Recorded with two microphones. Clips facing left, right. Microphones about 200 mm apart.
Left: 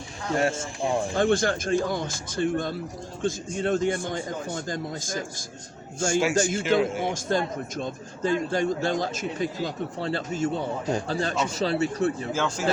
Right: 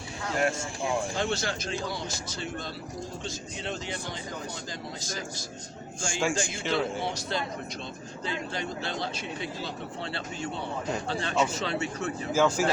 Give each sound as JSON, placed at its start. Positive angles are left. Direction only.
{"t": 0.3, "sound": "speech", "side_deg": 30}
{"t": 1.1, "sound": "a man's voice", "side_deg": 50}
{"t": 12.3, "sound": "speech", "side_deg": -10}